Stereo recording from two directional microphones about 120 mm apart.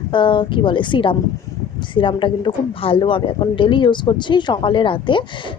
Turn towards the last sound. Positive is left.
turn(degrees=45)  # may be behind; listen again after turning